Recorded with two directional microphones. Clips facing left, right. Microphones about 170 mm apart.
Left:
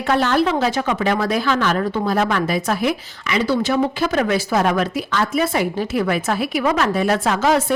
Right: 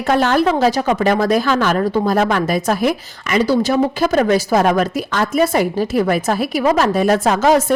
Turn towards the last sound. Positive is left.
turn(degrees=-45)  # may be behind; listen again after turning